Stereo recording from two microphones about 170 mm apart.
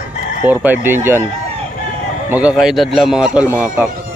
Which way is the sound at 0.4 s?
10° right (ahead or behind).